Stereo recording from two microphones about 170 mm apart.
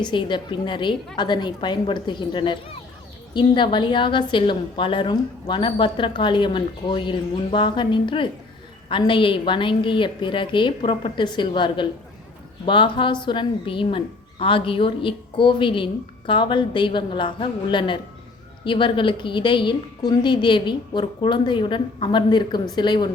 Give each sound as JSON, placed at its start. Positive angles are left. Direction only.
{"t": 0.0, "sound": "a woman's voice", "side_deg": 30}